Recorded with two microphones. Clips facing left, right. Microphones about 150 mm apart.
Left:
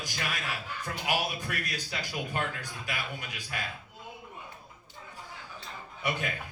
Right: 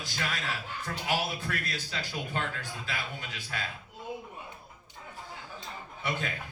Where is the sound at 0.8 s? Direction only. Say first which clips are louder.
Even; 15° left (ahead or behind).